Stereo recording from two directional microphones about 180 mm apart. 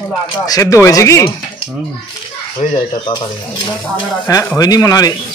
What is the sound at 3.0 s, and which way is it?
Speech, 25° left (ahead or behind).